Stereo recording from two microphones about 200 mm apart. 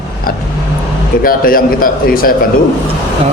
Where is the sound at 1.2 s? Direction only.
45° left (ahead or behind).